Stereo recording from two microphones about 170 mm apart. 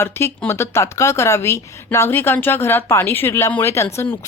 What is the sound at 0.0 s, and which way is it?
Speech, 15° left (ahead or behind).